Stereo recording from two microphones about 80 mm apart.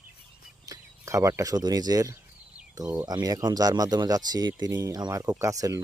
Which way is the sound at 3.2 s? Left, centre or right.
Right.